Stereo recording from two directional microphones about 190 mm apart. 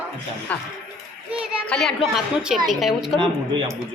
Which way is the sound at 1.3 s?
Centre (ahead or behind).